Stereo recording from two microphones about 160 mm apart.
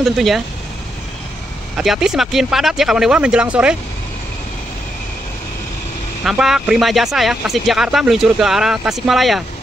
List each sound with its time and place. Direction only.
0.0 s speech: centre (ahead or behind)
1.8 s speech: 5° right (ahead or behind)
6.2 s speech: 5° right (ahead or behind)